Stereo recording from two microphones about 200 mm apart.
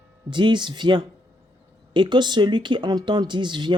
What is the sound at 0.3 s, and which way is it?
Speech, 25° right (ahead or behind).